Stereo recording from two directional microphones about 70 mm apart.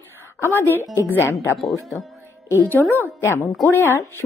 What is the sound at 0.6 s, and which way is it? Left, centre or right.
Speech, left.